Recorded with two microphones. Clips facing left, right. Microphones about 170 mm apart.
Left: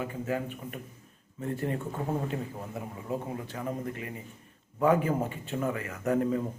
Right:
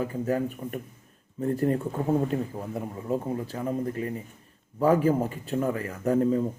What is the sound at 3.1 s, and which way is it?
Speech, 35° right (ahead or behind).